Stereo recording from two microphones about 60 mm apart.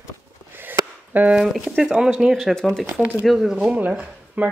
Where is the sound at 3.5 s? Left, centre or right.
Centre.